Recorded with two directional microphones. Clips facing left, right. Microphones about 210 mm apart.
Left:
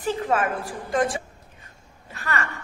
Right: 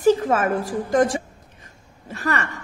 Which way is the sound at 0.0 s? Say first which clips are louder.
Right 6 dB; 40° right (ahead or behind).